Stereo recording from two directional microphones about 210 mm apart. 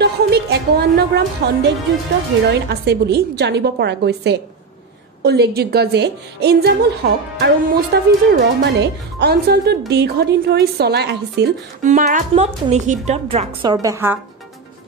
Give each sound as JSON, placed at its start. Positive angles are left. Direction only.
{"t": 0.0, "sound": "speech", "side_deg": -50}
{"t": 11.8, "sound": "a woman's voice", "side_deg": -35}